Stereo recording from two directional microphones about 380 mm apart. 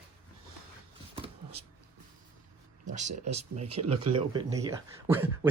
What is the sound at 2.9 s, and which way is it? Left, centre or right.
Speech, centre.